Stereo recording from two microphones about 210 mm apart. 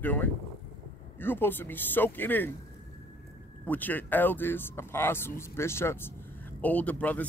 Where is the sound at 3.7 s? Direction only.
10° left (ahead or behind).